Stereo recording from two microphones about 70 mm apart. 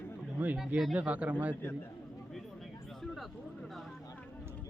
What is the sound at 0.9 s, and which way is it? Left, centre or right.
Speech, right.